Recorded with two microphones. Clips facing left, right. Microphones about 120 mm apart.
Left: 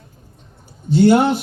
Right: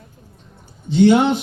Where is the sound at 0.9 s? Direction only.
45° left (ahead or behind).